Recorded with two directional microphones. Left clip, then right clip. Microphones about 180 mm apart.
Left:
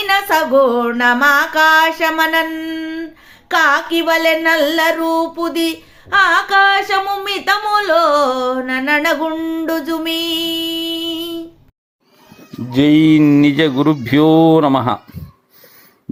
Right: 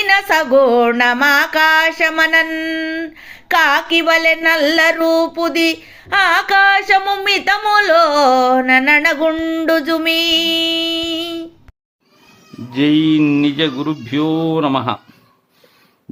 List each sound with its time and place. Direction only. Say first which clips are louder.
0.0 s music: right 1 dB; 5° right (ahead or behind)
5.0 s a sound: right 3 dB; 5° right (ahead or behind)
12.7 s mantra: left 3 dB; 20° left (ahead or behind)